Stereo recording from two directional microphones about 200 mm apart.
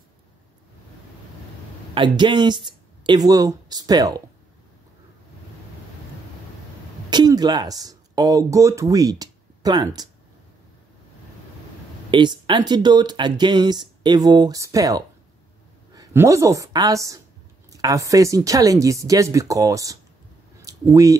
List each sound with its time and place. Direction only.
2.0 s speech: 25° right (ahead or behind)
7.1 s speech: 20° right (ahead or behind)
12.1 s speech: 25° right (ahead or behind)